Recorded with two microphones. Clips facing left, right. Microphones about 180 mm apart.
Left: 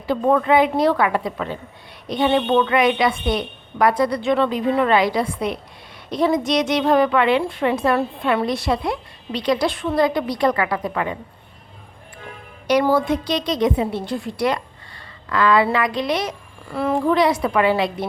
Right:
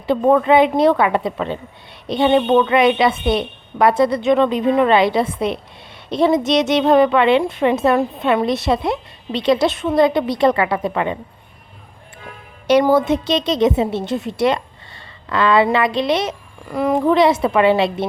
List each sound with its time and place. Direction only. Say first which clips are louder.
0.1 s a woman's voice: right 3 dB; 20° right (ahead or behind)
12.8 s a woman's voice: right 3 dB; 20° right (ahead or behind)